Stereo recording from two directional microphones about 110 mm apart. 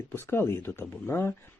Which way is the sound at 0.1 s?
20° left (ahead or behind).